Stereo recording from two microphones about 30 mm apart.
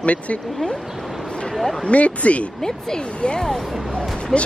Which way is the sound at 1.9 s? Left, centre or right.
Left.